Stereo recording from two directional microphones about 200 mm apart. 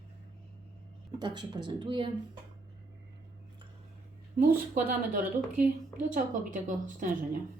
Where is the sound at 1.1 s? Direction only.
20° right (ahead or behind).